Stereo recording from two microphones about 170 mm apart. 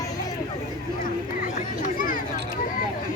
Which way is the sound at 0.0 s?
20° left (ahead or behind).